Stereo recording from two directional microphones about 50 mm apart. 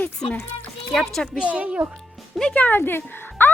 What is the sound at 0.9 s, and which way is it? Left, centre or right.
Speech, centre.